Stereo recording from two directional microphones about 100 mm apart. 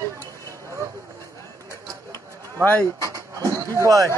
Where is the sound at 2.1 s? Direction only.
15° left (ahead or behind).